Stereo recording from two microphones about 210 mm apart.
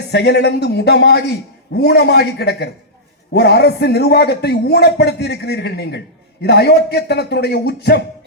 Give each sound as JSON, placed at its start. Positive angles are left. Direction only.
{"t": 0.1, "sound": "a man's voice", "side_deg": 50}